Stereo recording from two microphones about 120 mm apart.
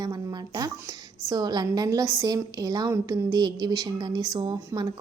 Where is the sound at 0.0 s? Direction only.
35° right (ahead or behind).